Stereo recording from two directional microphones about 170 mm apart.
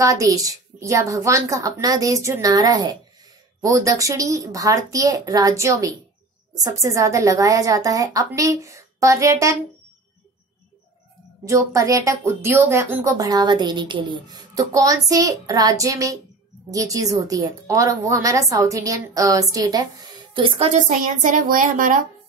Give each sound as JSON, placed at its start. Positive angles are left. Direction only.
{"t": 0.0, "sound": "a woman's voice", "side_deg": -20}
{"t": 11.4, "sound": "a woman's voice", "side_deg": -20}